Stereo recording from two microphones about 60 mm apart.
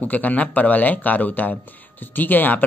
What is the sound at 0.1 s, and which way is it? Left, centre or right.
Speech, left.